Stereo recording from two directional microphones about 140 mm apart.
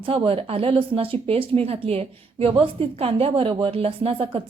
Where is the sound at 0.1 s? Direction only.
45° right (ahead or behind).